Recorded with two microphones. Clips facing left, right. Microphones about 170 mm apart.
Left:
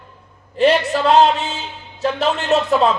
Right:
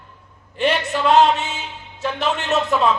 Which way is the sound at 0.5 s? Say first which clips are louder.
Left 5 dB; 35° left (ahead or behind).